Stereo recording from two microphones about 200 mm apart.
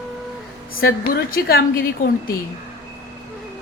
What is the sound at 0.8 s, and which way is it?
A woman's voice, 50° left (ahead or behind).